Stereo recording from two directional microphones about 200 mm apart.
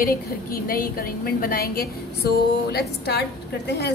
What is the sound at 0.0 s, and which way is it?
A woman's voice, 45° left (ahead or behind).